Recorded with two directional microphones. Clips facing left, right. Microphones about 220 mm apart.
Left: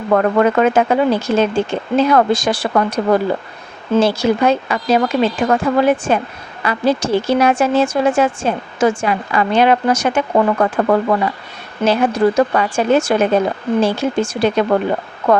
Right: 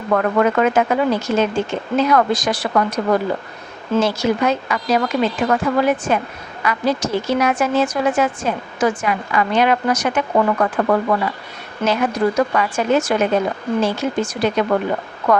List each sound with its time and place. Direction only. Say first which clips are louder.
0.1 s a woman's voice: left 3 dB; 35° left (ahead or behind)